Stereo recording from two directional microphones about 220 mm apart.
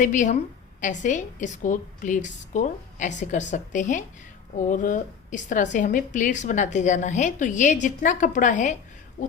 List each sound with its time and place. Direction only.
0.0 s a woman's voice: 35° left (ahead or behind)